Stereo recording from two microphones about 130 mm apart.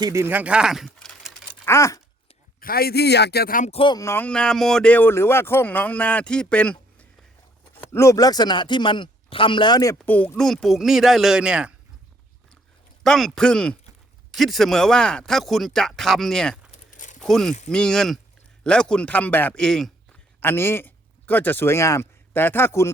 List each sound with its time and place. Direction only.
0.0 s speech: 20° right (ahead or behind); by 1.4 s 5° left (ahead or behind)
1.6 s a sound: 25° left (ahead or behind)
2.6 s speech: 90° left
3.7 s speech: 45° left (ahead or behind)
3.9 s speech: 20° left (ahead or behind)
7.8 s speech: 20° left (ahead or behind)
10.1 s speech: 10° left (ahead or behind); by 11.7 s 5° right (ahead or behind)
13.0 s speech: centre (ahead or behind)
16.9 s a sound: 80° left
17.2 s speech: 5° left (ahead or behind)
20.4 s speech: 15° left (ahead or behind)